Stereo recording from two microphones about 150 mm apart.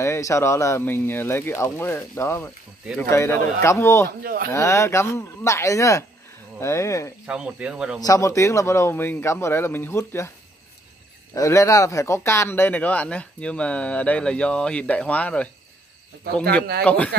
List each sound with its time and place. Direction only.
0.0 s speech: 20° left (ahead or behind)
4.2 s speech: 80° right
4.5 s speech: 20° left (ahead or behind)
7.2 s speech: 5° right (ahead or behind)
8.0 s speech: 20° left (ahead or behind)
11.3 s speech: 20° left (ahead or behind)
16.8 s speech: 10° left (ahead or behind)